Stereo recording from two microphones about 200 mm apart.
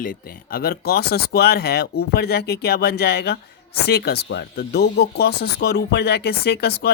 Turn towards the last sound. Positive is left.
turn(degrees=55)  # may be behind; listen again after turning